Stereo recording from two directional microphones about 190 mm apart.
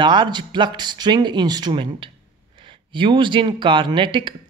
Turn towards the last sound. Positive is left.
turn(degrees=-25)  # may be behind; listen again after turning